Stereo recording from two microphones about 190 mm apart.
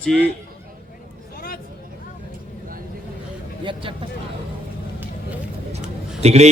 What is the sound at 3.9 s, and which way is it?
Speech, 25° right (ahead or behind).